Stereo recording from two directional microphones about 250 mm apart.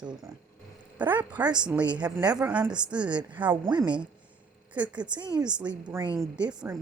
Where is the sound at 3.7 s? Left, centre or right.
Centre.